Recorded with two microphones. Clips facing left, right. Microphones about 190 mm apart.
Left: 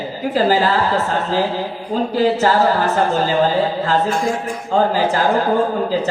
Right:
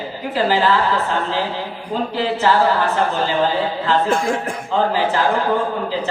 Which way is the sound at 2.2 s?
40° left (ahead or behind).